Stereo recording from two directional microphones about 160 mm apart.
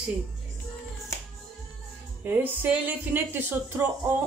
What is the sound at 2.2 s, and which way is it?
Speech, 10° right (ahead or behind).